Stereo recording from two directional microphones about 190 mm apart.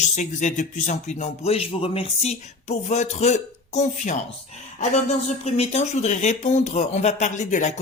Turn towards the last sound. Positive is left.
turn(degrees=40)  # may be behind; listen again after turning